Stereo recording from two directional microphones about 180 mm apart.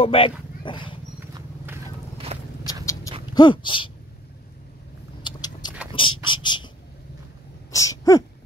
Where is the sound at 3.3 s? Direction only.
25° left (ahead or behind).